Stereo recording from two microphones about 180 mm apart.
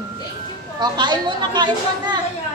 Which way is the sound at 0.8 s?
25° right (ahead or behind).